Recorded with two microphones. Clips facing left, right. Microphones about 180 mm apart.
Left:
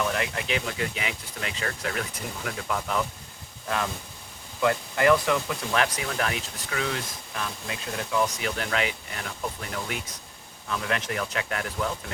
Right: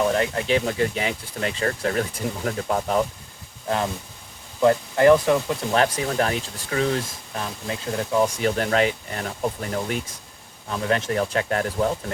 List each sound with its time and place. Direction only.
0.0 s speech: 35° right (ahead or behind)
4.6 s speech: 30° right (ahead or behind)